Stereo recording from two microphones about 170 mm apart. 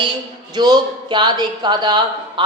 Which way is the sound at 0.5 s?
25° right (ahead or behind).